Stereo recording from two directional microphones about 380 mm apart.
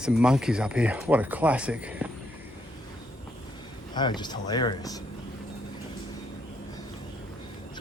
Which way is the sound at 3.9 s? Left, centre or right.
Centre.